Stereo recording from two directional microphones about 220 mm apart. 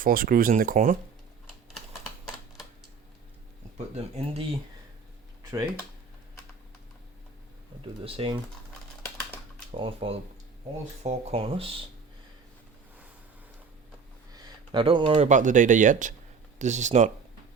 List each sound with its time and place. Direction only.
0.0 s speech: 40° right (ahead or behind)
3.9 s speech: 30° right (ahead or behind)
5.4 s a sound: 15° right (ahead or behind)
8.0 s speech: 25° right (ahead or behind)
9.7 s speech: 25° right (ahead or behind)
14.3 s speech: 20° right (ahead or behind)